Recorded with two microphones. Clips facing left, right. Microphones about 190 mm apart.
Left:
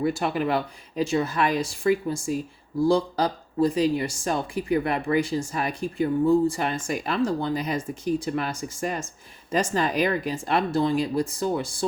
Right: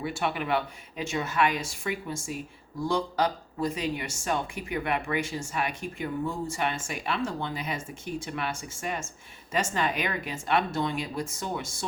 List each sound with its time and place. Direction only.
0.0 s speech: 35° left (ahead or behind)